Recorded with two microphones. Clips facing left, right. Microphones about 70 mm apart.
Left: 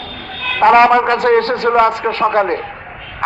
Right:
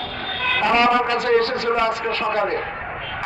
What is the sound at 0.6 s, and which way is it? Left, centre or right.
A man's voice, left.